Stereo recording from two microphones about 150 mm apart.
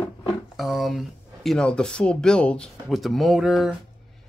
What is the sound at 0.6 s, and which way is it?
Speech, centre (ahead or behind).